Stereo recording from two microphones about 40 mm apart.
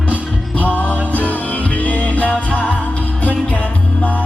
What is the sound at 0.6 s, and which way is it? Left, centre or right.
Music, left.